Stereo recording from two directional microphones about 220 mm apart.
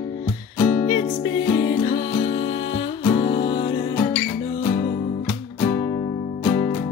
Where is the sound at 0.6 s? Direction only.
35° left (ahead or behind).